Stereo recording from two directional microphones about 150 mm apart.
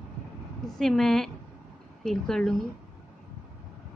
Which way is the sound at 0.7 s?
5° left (ahead or behind).